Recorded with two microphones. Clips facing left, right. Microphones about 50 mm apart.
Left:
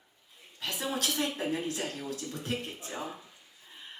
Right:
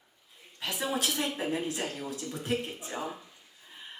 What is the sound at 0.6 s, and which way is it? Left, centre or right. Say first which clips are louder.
Speech: right 2 dB; centre.